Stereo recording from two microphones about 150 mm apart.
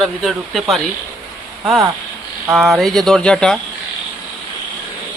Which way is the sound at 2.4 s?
Centre (ahead or behind).